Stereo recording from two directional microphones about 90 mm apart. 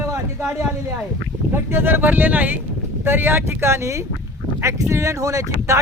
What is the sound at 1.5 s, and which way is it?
Speech, 25° right (ahead or behind).